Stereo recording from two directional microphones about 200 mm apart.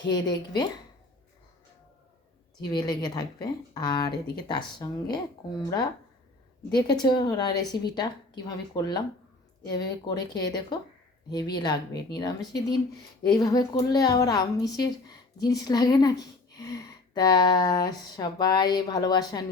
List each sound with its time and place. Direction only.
0.1 s speech: 20° left (ahead or behind)
2.7 s speech: 20° left (ahead or behind)